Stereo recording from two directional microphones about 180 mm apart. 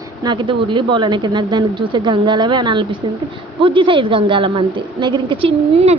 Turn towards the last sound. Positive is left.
turn(degrees=-30)  # may be behind; listen again after turning